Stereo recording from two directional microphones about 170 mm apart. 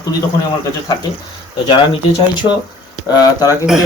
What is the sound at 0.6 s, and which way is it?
Speech, 20° left (ahead or behind).